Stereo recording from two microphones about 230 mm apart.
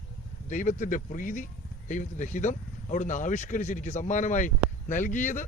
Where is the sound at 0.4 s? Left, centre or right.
Left.